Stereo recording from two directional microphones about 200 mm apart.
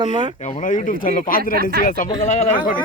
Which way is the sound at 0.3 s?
35° left (ahead or behind).